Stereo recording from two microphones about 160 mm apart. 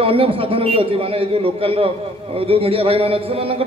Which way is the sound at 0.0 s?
35° right (ahead or behind).